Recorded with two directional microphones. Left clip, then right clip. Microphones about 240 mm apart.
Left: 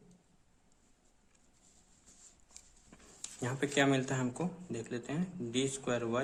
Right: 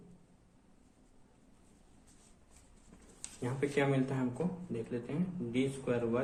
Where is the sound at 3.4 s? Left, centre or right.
Left.